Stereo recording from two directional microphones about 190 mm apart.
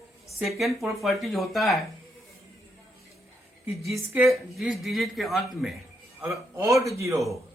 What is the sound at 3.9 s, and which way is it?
Speech, 15° right (ahead or behind).